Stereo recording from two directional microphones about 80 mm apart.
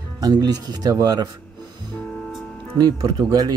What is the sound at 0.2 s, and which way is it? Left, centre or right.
Speech, right.